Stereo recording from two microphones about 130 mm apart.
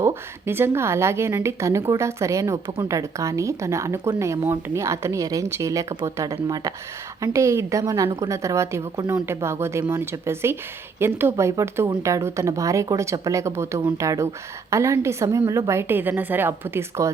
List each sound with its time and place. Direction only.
0.0 s a woman's voice: 20° right (ahead or behind)
7.2 s a woman's voice: 20° right (ahead or behind)